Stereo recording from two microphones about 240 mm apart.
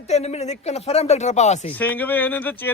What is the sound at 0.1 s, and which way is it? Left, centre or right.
Speech, left.